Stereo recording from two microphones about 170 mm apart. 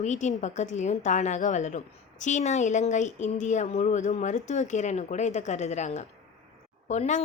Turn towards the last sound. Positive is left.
turn(degrees=45)  # may be behind; listen again after turning